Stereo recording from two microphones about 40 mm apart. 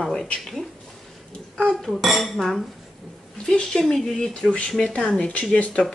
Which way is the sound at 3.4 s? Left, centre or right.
Left.